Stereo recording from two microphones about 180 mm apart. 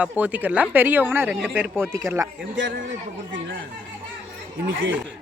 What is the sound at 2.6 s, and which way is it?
Speech, 90° right.